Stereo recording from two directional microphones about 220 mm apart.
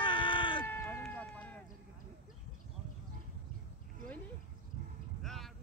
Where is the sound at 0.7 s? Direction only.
10° left (ahead or behind).